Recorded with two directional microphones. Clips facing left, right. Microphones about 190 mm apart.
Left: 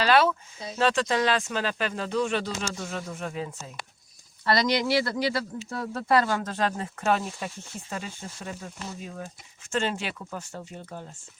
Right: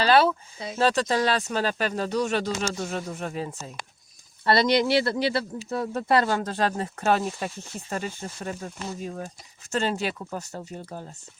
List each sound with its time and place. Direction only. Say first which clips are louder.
0.0 s speech: right 2 dB; 30° right (ahead or behind)